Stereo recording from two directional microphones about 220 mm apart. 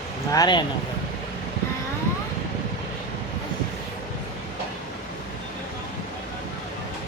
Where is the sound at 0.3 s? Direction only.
20° left (ahead or behind).